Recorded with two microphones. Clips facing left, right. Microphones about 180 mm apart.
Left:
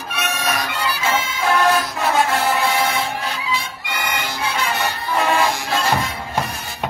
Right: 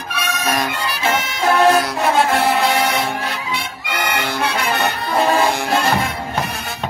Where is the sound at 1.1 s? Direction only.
70° right (ahead or behind).